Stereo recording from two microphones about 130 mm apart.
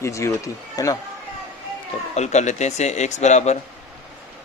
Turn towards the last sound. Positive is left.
turn(degrees=60)  # may be behind; listen again after turning